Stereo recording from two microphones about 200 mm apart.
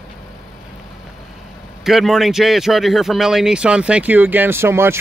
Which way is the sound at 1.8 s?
Centre (ahead or behind).